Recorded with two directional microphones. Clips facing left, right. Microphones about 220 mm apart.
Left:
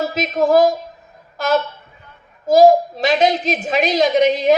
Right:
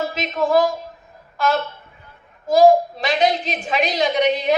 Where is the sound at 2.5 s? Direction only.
40° left (ahead or behind).